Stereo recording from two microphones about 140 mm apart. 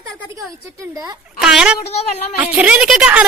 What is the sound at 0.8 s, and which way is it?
Speech, 25° right (ahead or behind).